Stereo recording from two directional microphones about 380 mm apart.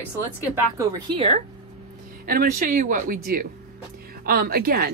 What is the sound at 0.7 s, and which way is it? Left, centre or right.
A woman's voice, centre.